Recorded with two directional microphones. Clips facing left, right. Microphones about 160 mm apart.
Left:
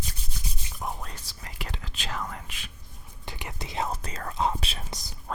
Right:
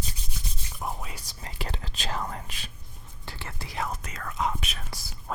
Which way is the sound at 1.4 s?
30° right (ahead or behind).